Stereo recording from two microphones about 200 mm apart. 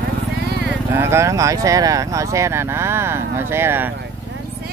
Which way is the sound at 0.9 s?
15° right (ahead or behind).